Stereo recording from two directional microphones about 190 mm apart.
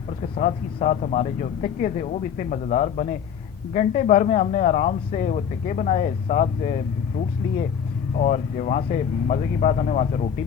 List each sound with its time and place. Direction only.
0.3 s speech: 40° left (ahead or behind)
8.2 s speech: 40° left (ahead or behind)